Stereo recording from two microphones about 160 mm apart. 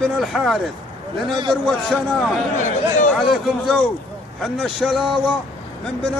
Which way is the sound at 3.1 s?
Centre (ahead or behind).